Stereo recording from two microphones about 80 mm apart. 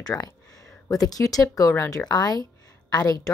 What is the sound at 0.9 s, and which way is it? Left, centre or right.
A woman's voice, left.